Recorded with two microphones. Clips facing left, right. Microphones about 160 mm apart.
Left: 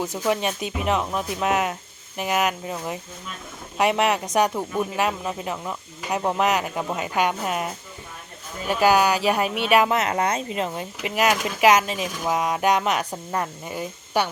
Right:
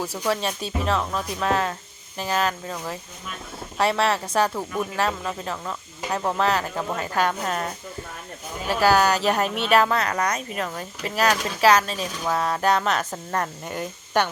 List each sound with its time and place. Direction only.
0.3 s speech: 15° left (ahead or behind)
8.7 s speech: 15° left (ahead or behind)